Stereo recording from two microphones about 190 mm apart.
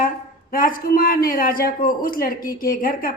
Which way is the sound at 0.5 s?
50° left (ahead or behind).